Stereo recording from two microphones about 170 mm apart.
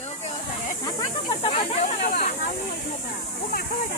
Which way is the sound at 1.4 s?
35° left (ahead or behind).